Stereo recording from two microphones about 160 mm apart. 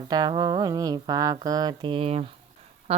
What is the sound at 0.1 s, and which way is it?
Speech, 25° right (ahead or behind).